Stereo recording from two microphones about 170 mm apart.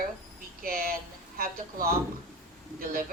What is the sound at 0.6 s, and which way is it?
Speech, 60° right (ahead or behind).